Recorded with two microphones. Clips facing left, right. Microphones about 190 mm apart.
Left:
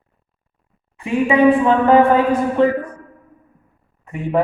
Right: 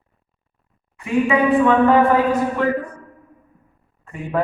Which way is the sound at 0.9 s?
30° left (ahead or behind).